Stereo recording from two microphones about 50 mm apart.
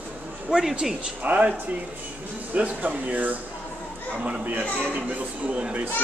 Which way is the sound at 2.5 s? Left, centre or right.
Right.